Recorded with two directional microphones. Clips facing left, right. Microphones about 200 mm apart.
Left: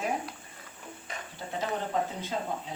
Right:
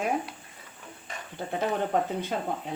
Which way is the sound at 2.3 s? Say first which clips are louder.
Left 1 dB; 60° right (ahead or behind).